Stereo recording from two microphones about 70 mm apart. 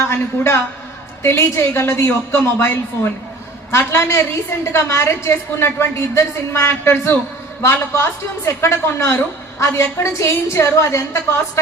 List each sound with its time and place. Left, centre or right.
0.0 s a woman's voice: left